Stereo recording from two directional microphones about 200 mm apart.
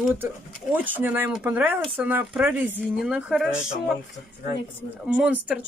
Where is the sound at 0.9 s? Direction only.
10° right (ahead or behind).